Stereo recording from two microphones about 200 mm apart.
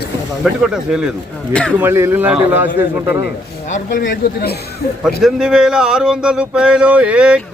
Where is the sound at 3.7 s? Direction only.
40° left (ahead or behind).